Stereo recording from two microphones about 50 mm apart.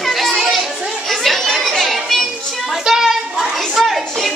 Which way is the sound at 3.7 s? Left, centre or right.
Centre.